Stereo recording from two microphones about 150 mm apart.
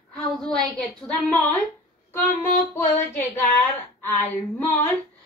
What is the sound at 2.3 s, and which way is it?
Child singing, 65° left (ahead or behind).